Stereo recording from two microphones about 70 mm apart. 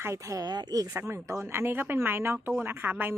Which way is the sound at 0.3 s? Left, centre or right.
Right.